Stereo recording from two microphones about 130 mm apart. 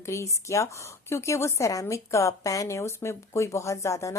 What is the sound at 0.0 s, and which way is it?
A woman's voice, 20° left (ahead or behind).